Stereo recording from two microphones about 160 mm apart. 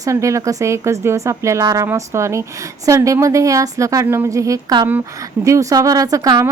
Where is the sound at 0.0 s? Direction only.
20° right (ahead or behind).